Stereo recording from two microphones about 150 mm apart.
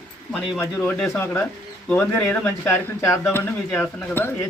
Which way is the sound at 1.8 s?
15° left (ahead or behind).